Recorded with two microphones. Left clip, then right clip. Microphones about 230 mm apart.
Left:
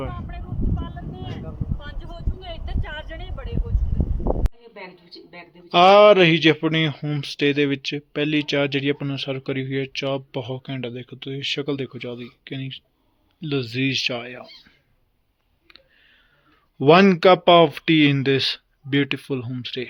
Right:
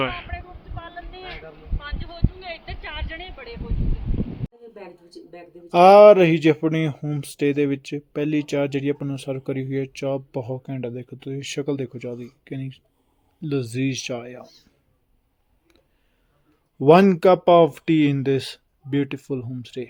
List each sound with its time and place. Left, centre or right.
0.8 s vehicle: right
2.8 s a sound: centre
5.7 s speech: centre
15.6 s clicking: centre
16.7 s speech: centre